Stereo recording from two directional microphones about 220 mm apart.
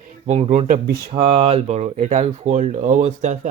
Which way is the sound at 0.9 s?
45° right (ahead or behind).